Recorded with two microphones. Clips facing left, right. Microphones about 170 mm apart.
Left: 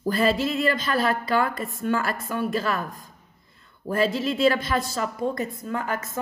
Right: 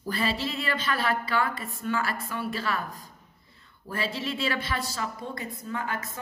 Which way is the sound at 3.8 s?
45° left (ahead or behind).